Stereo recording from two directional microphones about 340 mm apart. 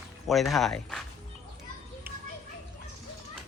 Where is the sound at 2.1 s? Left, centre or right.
Centre.